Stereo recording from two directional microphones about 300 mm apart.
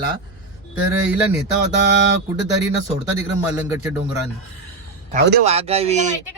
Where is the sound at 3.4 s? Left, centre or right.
Centre.